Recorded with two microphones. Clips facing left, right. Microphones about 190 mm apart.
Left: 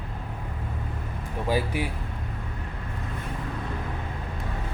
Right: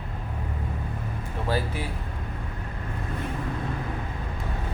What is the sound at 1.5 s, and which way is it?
Speech, 15° left (ahead or behind).